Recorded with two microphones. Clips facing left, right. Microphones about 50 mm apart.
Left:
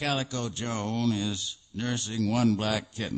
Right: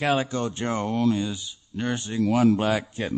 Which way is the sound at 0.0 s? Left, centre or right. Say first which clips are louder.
Right 6 dB; right.